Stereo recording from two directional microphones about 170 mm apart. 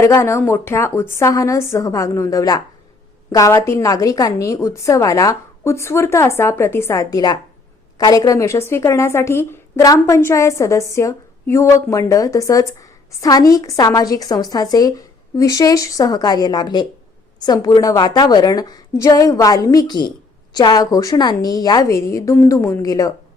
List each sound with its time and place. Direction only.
0.0 s a woman's voice: 15° left (ahead or behind)